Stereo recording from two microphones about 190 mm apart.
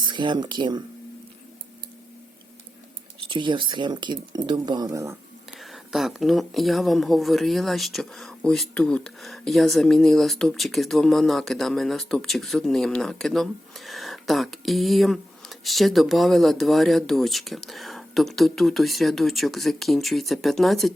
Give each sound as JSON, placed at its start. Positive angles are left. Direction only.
{"t": 0.1, "sound": "speech", "side_deg": -25}
{"t": 3.2, "sound": "speech", "side_deg": -25}
{"t": 5.5, "sound": "speech", "side_deg": 0}